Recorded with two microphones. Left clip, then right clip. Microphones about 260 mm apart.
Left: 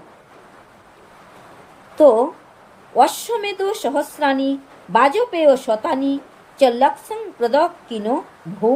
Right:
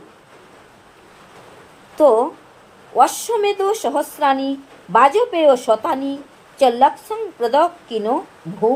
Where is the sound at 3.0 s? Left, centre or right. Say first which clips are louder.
Right 1 dB; centre.